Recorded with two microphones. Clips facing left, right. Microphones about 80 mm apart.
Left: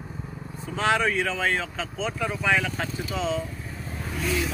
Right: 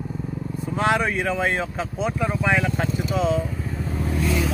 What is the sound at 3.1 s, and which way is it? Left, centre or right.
Speech, right.